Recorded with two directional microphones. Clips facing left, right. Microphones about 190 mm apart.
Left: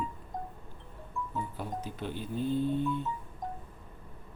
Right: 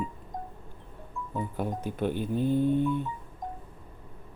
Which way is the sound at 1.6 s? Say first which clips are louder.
Right 7 dB; 55° right (ahead or behind).